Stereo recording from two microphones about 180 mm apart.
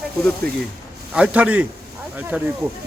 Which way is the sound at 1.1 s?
5° right (ahead or behind).